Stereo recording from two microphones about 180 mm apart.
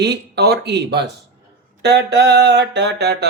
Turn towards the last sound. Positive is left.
turn(degrees=-65)  # may be behind; listen again after turning